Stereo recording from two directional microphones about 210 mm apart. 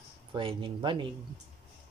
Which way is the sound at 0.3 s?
25° right (ahead or behind).